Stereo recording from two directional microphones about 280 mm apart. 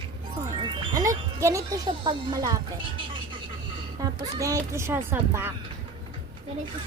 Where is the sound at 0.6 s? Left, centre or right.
Centre.